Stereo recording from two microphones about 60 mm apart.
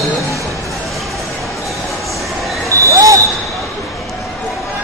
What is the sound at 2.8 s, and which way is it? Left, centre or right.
Basketball bounce, right.